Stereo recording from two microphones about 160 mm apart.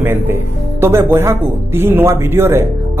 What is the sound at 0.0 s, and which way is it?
Speech, 15° right (ahead or behind).